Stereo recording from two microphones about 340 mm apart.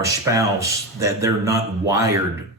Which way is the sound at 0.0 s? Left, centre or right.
Centre.